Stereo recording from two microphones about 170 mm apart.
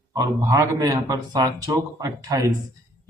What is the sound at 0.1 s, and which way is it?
Speech, 20° right (ahead or behind).